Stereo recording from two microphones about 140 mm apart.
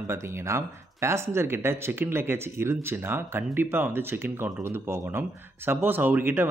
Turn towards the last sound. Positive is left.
turn(degrees=-15)  # may be behind; listen again after turning